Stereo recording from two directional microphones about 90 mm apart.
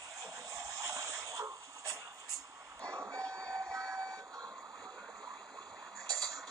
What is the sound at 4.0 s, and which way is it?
Fire alarm, 10° left (ahead or behind).